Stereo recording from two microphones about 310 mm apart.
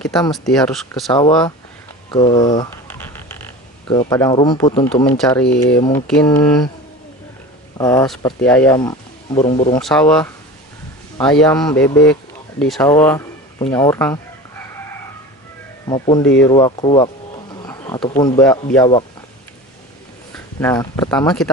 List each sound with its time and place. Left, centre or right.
0.3 s speech: centre
1.1 s speech: centre
2.0 s a sound: centre
3.8 s speech: centre
5.2 s speech: centre
5.8 s speech: centre
7.7 s speech: centre
9.8 s speech: centre
11.2 s speech: centre
15.9 s speech: centre
20.3 s speech: centre